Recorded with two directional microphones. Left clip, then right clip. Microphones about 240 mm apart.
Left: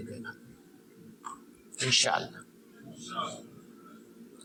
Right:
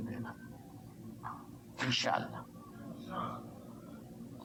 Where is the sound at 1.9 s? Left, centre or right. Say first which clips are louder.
Left 7 dB; left.